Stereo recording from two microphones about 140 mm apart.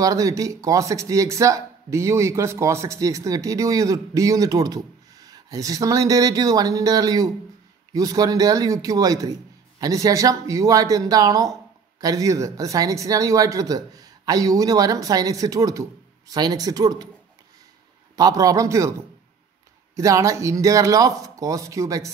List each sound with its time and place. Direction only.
0.0 s speech: 25° right (ahead or behind)
18.1 s speech: 25° right (ahead or behind)
20.0 s speech: 25° right (ahead or behind)